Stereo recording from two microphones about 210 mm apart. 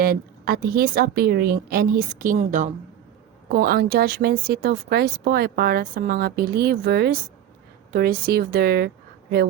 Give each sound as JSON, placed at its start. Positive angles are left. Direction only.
{"t": 0.0, "sound": "a woman's voice", "side_deg": -45}